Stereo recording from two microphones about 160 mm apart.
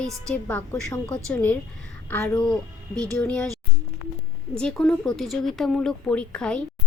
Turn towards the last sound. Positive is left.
turn(degrees=5)  # may be behind; listen again after turning